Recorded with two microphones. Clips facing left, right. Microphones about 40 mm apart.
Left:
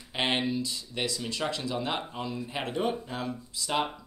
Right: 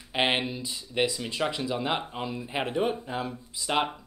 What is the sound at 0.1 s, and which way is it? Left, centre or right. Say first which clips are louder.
Speech: right 2 dB; centre.